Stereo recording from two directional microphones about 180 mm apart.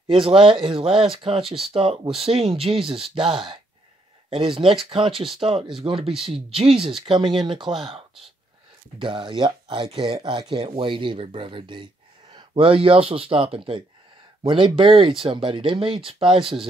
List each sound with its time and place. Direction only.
0.0 s speech: 30° right (ahead or behind)
8.9 s speech: 25° right (ahead or behind)